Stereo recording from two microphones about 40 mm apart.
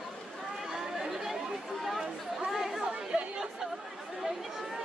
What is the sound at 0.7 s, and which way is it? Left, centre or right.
Chatter, centre.